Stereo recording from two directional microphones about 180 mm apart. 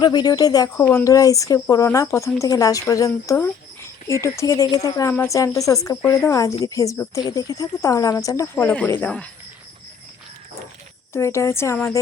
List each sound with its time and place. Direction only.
0.0 s speech: 25° left (ahead or behind); by 9.3 s 5° left (ahead or behind)
11.1 s speech: 15° left (ahead or behind)